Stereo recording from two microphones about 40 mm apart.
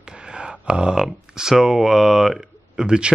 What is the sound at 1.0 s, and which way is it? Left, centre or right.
Speech, centre.